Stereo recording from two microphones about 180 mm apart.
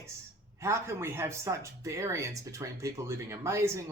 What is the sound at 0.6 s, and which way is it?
Speech, 15° right (ahead or behind).